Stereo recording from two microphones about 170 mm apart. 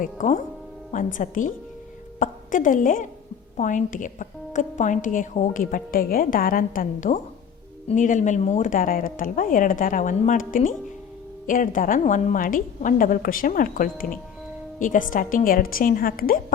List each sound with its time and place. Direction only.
0.0 s a woman's voice: 45° left (ahead or behind)